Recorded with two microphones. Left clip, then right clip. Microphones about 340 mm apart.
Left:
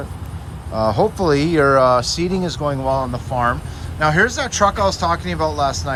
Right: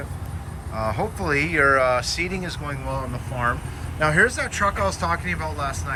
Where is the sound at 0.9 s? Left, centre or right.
Centre.